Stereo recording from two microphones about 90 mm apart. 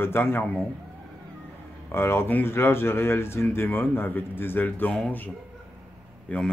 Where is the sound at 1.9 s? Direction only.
30° left (ahead or behind).